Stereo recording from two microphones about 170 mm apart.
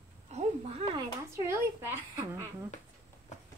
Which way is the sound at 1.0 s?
15° right (ahead or behind).